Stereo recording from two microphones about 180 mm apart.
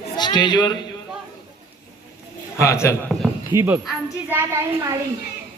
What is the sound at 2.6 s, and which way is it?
Speech, 15° left (ahead or behind).